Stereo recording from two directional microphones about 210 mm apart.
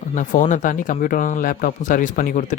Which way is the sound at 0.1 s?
35° left (ahead or behind).